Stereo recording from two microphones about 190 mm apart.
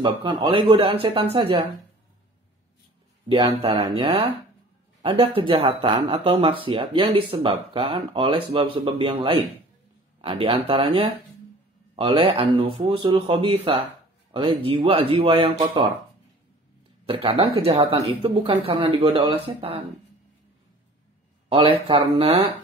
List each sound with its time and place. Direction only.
0.0 s speech: 25° right (ahead or behind)
3.3 s speech: 30° right (ahead or behind)
17.0 s speech: 30° right (ahead or behind)
21.5 s speech: 30° right (ahead or behind)